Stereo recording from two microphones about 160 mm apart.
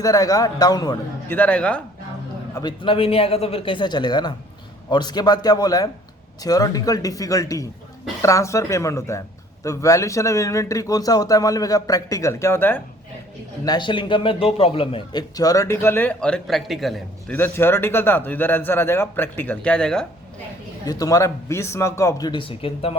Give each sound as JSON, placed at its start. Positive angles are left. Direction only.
{"t": 0.0, "sound": "speech", "side_deg": 20}
{"t": 1.3, "sound": "speech", "side_deg": 10}
{"t": 2.6, "sound": "speech", "side_deg": 30}
{"t": 13.7, "sound": "speech", "side_deg": 30}
{"t": 15.4, "sound": "speech", "side_deg": 20}
{"t": 17.3, "sound": "speech", "side_deg": 15}
{"t": 20.8, "sound": "speech", "side_deg": 25}
{"t": 22.3, "sound": "speech", "side_deg": 35}